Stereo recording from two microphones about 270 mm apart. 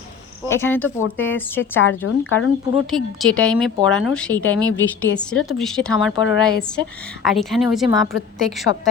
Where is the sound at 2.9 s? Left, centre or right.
Centre.